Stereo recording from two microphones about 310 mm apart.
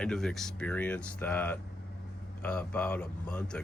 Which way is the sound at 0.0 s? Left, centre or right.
Centre.